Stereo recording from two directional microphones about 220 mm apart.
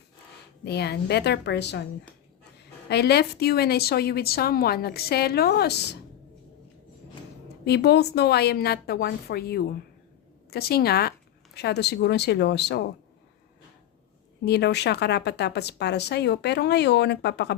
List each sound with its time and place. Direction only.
0.6 s a woman's voice: 50° left (ahead or behind)
2.9 s a woman's voice: 50° left (ahead or behind)
7.6 s a woman's voice: 50° left (ahead or behind)
14.4 s a woman's voice: 50° left (ahead or behind)